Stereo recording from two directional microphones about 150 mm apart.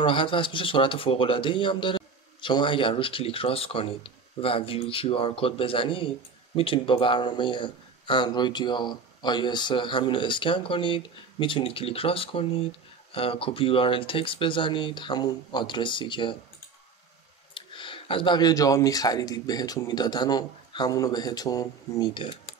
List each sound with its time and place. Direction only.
0.0 s speech: 35° left (ahead or behind)
17.6 s speech: 35° left (ahead or behind)